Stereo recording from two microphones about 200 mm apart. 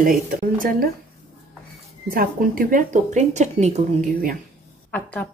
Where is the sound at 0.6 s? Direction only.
50° right (ahead or behind).